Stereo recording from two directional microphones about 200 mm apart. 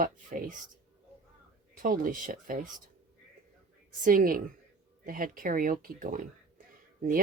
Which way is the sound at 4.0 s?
40° right (ahead or behind).